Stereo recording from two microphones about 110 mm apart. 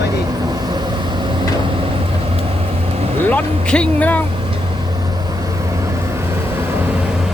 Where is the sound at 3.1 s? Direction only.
15° left (ahead or behind).